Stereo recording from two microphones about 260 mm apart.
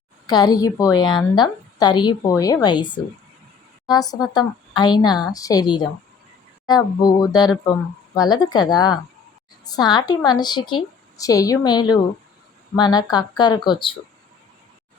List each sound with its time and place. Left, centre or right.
0.3 s a woman's voice: centre